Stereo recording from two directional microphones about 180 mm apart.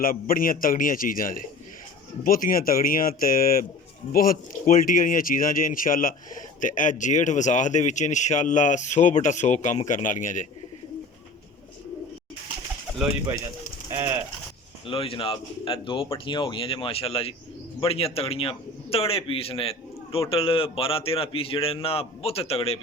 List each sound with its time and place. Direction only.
0.0 s speech: 50° left (ahead or behind)
14.8 s a man's voice: 30° left (ahead or behind)